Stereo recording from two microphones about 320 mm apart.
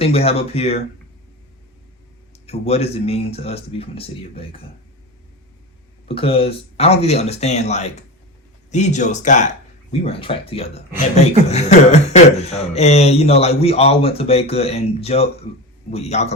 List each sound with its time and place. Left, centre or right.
0.0 s speech: centre
2.5 s speech: centre
6.1 s speech: centre